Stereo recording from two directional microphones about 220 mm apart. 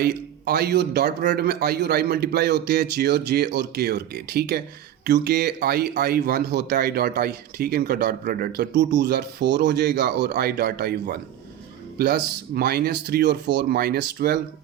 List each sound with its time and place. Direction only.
0.0 s speech: 45° right (ahead or behind)